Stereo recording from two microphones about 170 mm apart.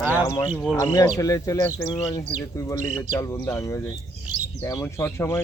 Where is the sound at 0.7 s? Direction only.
20° left (ahead or behind).